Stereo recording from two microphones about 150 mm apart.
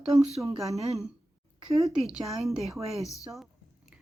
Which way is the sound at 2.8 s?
45° right (ahead or behind).